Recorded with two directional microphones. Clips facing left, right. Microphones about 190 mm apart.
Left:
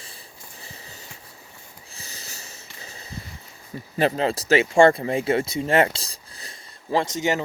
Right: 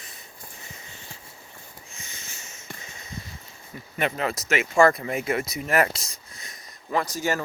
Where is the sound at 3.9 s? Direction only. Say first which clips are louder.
Left 5 dB; 30° left (ahead or behind).